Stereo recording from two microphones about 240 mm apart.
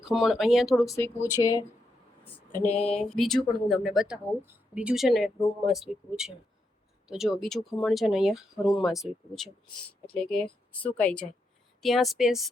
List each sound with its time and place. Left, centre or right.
0.0 s speech: centre
1.4 s a sound: left
2.9 s speech: centre